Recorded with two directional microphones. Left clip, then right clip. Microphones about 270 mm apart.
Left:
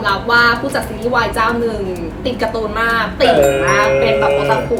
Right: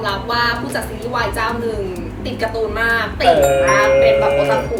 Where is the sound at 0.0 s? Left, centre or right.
Centre.